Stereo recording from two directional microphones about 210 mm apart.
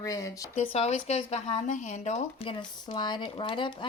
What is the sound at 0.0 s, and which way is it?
Speech, 15° left (ahead or behind).